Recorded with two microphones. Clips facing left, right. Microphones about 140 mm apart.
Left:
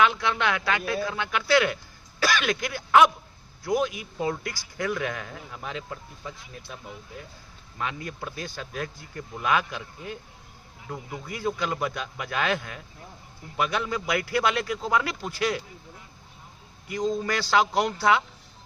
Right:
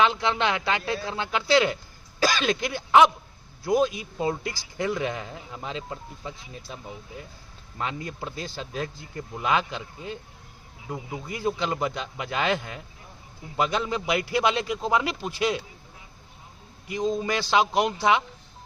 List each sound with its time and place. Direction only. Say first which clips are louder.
0.0 s a man's voice: right 1 dB; 25° right (ahead or behind)
7.8 s a man's voice: right 1 dB; 25° right (ahead or behind)
11.3 s a man's voice: right 1 dB; 25° right (ahead or behind)
16.9 s a man's voice: right 1 dB; 20° right (ahead or behind)